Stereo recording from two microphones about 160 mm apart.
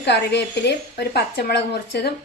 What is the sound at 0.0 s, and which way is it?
A woman's voice, 90° left.